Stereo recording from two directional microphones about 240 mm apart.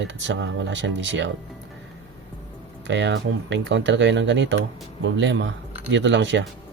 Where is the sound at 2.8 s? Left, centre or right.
Right.